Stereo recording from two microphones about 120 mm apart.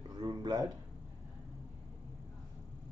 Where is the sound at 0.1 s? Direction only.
35° right (ahead or behind).